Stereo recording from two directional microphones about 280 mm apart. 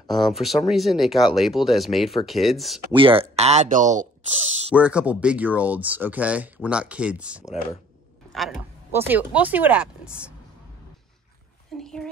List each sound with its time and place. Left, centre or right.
0.1 s speech: centre
2.9 s speech: centre
4.6 s speech: centre
11.7 s a sound: centre